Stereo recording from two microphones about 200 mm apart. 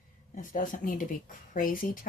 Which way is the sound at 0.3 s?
40° left (ahead or behind).